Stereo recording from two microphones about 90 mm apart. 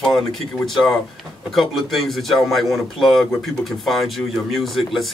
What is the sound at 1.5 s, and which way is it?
Speech, centre (ahead or behind).